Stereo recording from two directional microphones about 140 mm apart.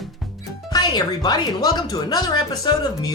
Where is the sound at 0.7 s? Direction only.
30° left (ahead or behind).